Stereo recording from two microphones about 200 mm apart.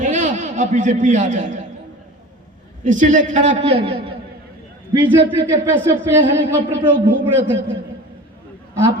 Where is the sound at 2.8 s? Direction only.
40° right (ahead or behind).